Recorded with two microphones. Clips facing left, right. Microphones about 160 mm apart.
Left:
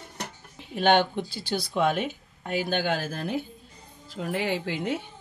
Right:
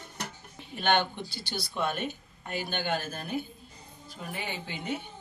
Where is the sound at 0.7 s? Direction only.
90° left.